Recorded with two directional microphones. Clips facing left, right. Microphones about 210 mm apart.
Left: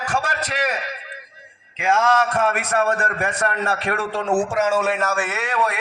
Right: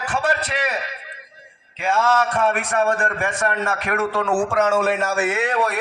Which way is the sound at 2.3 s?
40° left (ahead or behind).